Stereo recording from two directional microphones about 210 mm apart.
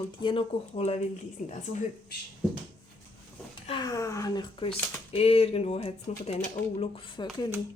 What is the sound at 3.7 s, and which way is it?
Speech, 20° left (ahead or behind).